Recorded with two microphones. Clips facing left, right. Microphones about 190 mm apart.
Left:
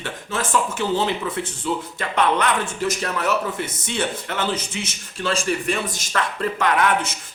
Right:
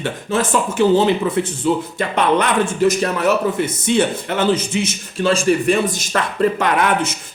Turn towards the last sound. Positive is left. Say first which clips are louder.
# right 3 dB
turn(degrees=-20)  # may be behind; listen again after turning